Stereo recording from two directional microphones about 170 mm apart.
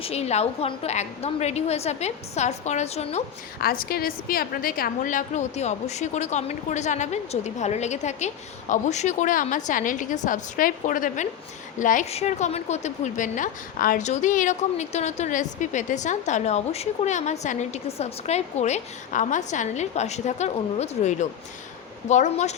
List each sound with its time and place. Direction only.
0.0 s a woman's voice: 40° left (ahead or behind)
3.6 s a woman's voice: 60° left (ahead or behind); by 22.5 s 45° left (ahead or behind)